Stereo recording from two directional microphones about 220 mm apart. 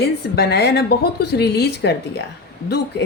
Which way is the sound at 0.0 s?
45° left (ahead or behind).